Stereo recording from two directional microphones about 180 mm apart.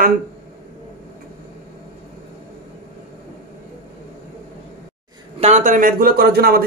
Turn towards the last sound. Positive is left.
turn(degrees=-60)  # may be behind; listen again after turning